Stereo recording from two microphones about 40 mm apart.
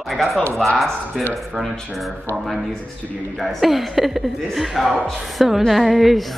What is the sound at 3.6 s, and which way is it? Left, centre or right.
A woman's voice, centre.